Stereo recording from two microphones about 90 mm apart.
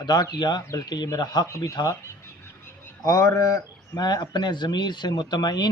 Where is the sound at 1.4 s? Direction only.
30° left (ahead or behind).